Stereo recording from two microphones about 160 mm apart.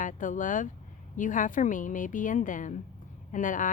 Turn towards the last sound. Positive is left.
turn(degrees=55)  # may be behind; listen again after turning